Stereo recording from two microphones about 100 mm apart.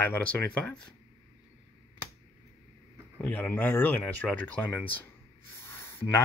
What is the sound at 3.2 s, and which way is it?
Speech, 20° left (ahead or behind).